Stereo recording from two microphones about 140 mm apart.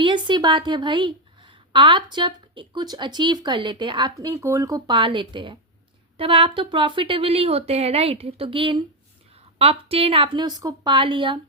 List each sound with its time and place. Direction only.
0.0 s a woman's voice: 35° right (ahead or behind)
4.9 s a woman's voice: 35° right (ahead or behind)